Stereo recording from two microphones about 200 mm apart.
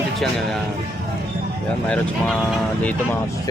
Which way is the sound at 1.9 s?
5° left (ahead or behind).